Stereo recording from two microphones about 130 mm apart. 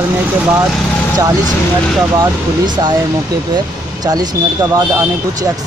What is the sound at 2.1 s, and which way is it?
A man's voice, 30° right (ahead or behind).